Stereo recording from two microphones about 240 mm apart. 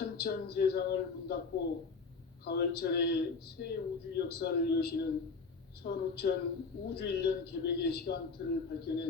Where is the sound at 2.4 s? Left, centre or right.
Left.